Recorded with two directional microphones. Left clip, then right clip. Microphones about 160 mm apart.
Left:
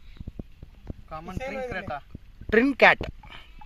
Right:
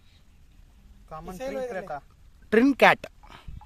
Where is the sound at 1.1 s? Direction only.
50° right (ahead or behind).